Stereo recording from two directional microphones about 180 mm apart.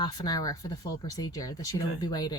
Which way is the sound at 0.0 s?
20° left (ahead or behind).